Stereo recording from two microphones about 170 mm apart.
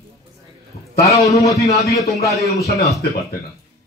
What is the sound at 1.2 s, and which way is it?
Speech, 20° left (ahead or behind).